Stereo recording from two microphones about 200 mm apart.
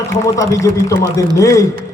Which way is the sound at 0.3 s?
15° left (ahead or behind).